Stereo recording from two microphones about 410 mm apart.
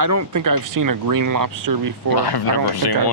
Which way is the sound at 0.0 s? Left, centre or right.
Right.